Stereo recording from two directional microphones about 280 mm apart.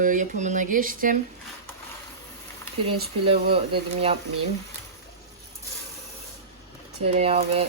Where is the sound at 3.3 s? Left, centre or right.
Centre.